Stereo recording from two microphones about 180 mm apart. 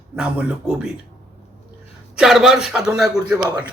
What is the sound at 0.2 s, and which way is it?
Speech, 5° right (ahead or behind).